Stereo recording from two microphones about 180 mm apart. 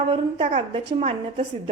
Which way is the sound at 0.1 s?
35° right (ahead or behind).